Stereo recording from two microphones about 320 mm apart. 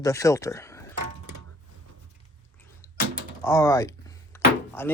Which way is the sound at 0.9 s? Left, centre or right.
Right.